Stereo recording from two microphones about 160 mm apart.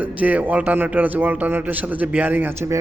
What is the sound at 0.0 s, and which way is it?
A man's voice, 10° right (ahead or behind).